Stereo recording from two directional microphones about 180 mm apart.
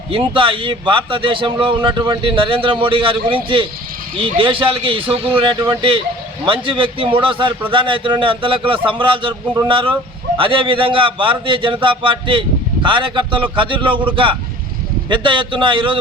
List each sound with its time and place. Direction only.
0.1 s a man's voice: 30° right (ahead or behind)
15.1 s a man's voice: 25° right (ahead or behind)